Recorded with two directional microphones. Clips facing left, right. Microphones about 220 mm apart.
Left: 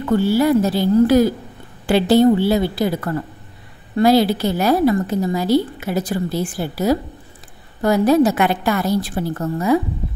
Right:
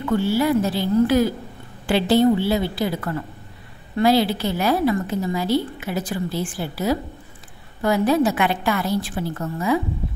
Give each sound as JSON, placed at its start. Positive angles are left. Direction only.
{"t": 0.0, "sound": "a woman's voice", "side_deg": 40}